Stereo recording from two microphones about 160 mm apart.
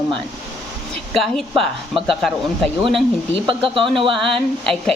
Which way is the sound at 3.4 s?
30° right (ahead or behind).